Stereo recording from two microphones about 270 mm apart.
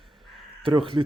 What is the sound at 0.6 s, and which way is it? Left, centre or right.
Speech, centre.